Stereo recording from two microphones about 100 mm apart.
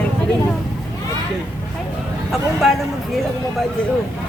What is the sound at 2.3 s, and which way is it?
Speech, centre (ahead or behind).